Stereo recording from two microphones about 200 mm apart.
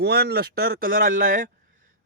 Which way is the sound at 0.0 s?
55° right (ahead or behind).